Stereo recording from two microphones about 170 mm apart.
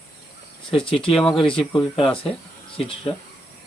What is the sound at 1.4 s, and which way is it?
A man's voice, 30° left (ahead or behind).